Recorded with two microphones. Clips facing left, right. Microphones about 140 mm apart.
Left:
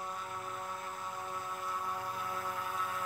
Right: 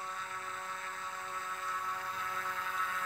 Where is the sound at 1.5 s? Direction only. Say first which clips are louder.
Left 1 dB; 25° left (ahead or behind).